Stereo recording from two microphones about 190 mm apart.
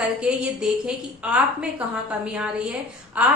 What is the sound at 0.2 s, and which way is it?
A woman's voice, 5° right (ahead or behind).